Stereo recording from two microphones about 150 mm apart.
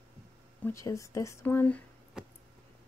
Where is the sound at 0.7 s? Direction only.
20° left (ahead or behind).